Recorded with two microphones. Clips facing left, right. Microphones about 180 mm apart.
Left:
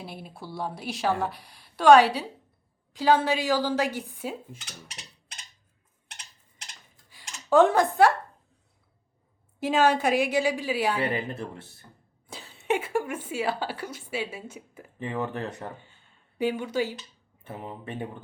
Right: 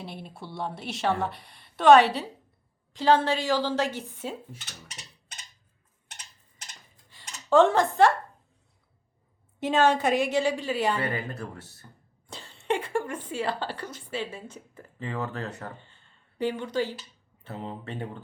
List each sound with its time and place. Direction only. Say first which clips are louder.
0.0 s a woman's voice: even; 5° left (ahead or behind)
7.1 s cutlery: even; 10° left (ahead or behind)
9.6 s a woman's voice: even; 5° left (ahead or behind)
11.0 s speech: left 2 dB; 20° left (ahead or behind)
12.3 s a woman's voice: left 1 dB; 5° left (ahead or behind)